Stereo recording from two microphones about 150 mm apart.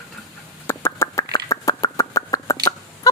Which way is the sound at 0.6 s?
20° left (ahead or behind).